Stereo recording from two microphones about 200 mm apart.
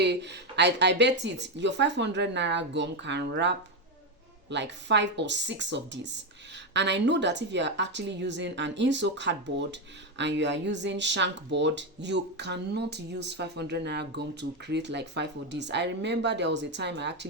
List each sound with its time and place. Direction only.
0.0 s speech: 60° right (ahead or behind)